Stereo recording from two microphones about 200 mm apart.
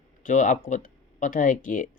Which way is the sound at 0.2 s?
40° left (ahead or behind).